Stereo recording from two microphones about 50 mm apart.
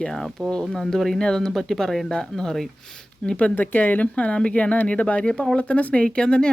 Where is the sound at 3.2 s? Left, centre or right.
Left.